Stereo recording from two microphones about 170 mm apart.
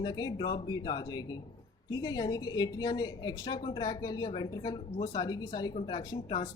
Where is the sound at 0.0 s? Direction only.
25° left (ahead or behind).